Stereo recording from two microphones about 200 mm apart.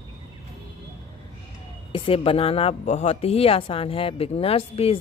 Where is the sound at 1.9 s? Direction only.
25° left (ahead or behind).